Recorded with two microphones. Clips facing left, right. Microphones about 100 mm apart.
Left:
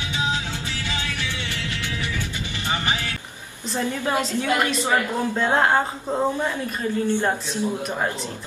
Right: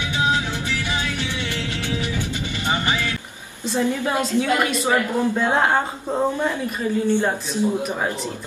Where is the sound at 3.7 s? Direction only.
15° right (ahead or behind).